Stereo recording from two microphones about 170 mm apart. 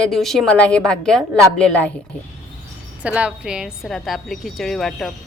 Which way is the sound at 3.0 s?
5° right (ahead or behind).